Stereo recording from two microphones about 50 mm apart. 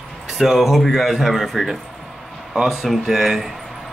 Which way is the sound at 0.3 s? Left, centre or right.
Centre.